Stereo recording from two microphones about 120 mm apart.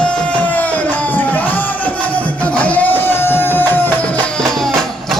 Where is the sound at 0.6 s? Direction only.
15° left (ahead or behind).